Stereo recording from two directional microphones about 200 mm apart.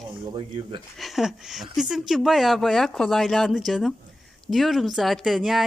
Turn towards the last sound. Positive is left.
turn(degrees=0)  # may be behind; listen again after turning